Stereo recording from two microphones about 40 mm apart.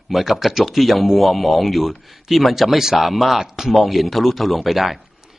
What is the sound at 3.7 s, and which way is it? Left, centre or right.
A man's voice, centre.